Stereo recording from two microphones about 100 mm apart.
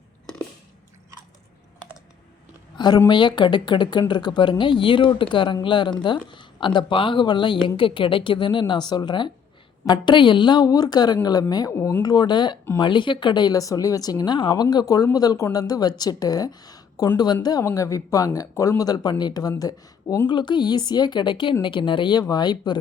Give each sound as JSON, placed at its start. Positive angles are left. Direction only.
{"t": 2.7, "sound": "a sound", "side_deg": 45}
{"t": 3.1, "sound": "a woman's voice", "side_deg": 50}
{"t": 11.8, "sound": "speech", "side_deg": 25}
{"t": 12.0, "sound": "a woman's voice", "side_deg": 45}
{"t": 20.2, "sound": "speech", "side_deg": 50}
{"t": 22.2, "sound": "speech", "side_deg": 45}